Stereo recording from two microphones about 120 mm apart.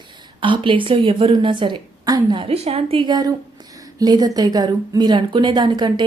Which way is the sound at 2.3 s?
55° right (ahead or behind).